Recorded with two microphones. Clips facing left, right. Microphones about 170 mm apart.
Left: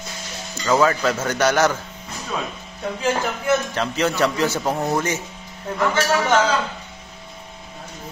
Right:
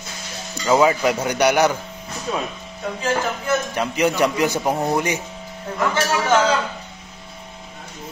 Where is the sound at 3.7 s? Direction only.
15° right (ahead or behind).